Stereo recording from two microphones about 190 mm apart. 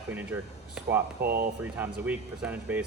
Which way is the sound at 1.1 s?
55° right (ahead or behind).